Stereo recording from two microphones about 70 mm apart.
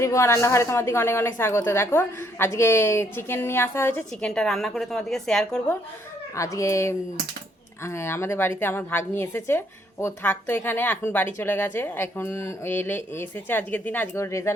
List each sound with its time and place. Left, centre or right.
0.0 s a woman's voice: left
4.2 s a woman's voice: centre
6.3 s a woman's voice: left
14.2 s speech: left